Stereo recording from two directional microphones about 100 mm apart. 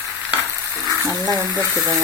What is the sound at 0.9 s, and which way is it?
Speech, 40° right (ahead or behind).